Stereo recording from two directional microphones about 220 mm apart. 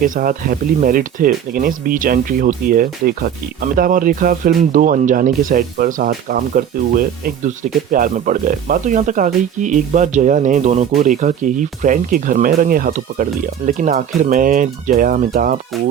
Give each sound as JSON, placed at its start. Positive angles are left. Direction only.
{"t": 0.0, "sound": "speech", "side_deg": -40}